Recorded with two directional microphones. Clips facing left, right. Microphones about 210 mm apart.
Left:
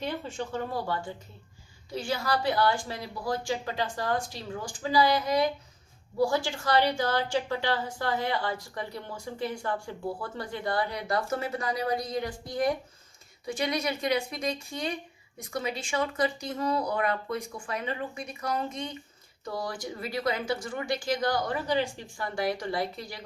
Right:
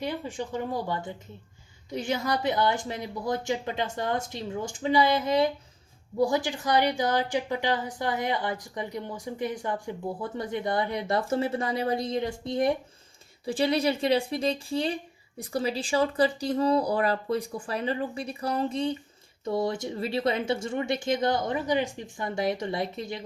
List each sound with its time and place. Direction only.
0.0 s a woman's voice: 15° right (ahead or behind)